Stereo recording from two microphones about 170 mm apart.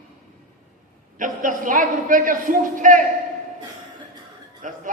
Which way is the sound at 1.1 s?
50° right (ahead or behind).